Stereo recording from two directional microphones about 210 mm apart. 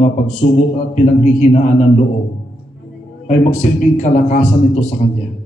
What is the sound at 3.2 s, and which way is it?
A man's voice, 35° left (ahead or behind).